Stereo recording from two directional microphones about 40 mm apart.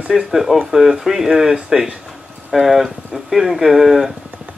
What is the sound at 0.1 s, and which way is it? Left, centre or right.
Speech, centre.